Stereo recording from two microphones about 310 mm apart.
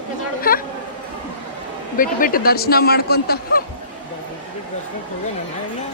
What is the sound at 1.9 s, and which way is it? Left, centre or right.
Speech, left.